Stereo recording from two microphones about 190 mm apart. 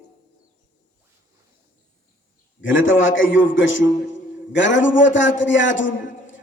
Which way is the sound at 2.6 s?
85° left.